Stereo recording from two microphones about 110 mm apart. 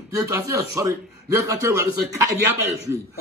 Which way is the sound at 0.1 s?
30° right (ahead or behind).